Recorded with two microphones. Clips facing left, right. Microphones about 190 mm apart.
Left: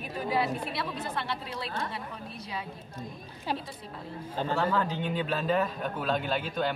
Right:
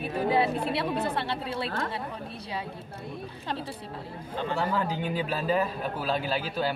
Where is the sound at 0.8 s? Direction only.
60° right (ahead or behind).